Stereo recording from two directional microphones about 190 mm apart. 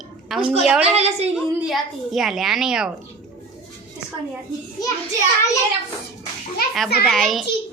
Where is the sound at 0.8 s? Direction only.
35° right (ahead or behind).